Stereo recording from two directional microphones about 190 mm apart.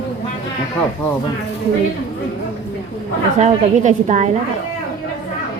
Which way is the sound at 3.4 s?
40° right (ahead or behind).